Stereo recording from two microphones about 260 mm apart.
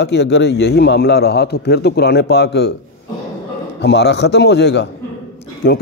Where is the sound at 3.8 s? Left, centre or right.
Left.